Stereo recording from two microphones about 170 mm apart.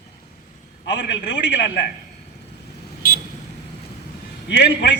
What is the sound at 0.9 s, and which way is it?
Speech, 90° left.